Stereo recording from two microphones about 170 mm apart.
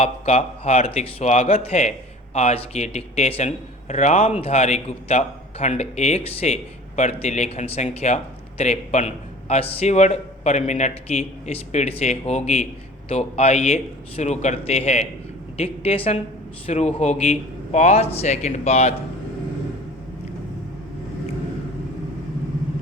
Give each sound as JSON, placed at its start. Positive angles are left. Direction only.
{"t": 0.0, "sound": "speech", "side_deg": 35}